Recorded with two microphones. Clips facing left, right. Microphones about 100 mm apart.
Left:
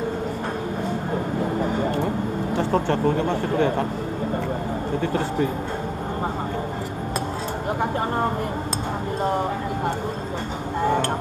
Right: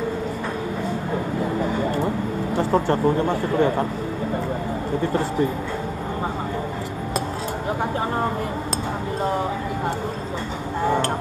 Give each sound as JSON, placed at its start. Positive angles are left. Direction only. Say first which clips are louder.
{"t": 2.7, "sound": "speech", "louder": "right 2 dB", "side_deg": -35}